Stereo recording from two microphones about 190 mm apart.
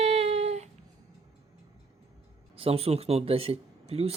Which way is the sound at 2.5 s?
30° right (ahead or behind).